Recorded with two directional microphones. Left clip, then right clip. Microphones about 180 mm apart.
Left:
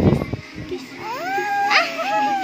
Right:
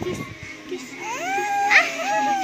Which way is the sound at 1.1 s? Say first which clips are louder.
Left 1 dB; 15° left (ahead or behind).